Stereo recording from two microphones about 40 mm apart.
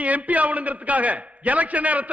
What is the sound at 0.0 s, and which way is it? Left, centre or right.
A man's voice, right.